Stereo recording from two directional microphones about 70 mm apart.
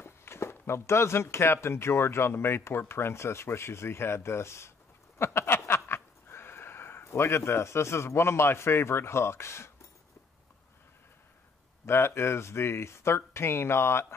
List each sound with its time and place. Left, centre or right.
0.0 s speech: left
5.2 s a sound: left
5.7 s speech: left
11.8 s speech: left